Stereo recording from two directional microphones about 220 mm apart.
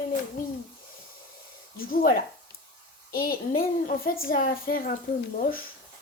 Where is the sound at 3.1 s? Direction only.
40° left (ahead or behind).